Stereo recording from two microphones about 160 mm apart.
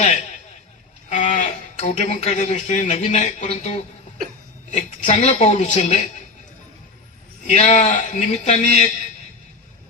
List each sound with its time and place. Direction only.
0.0 s a sound: 45° left (ahead or behind)
1.1 s speech: 45° left (ahead or behind)
7.5 s speech: 45° left (ahead or behind)